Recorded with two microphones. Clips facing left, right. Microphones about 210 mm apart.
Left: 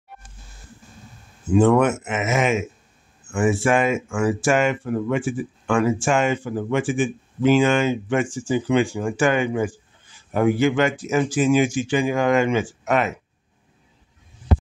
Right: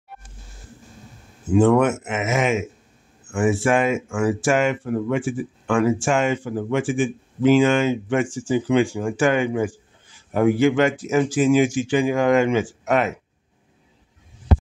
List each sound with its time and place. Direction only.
1.5 s speech: 40° right (ahead or behind)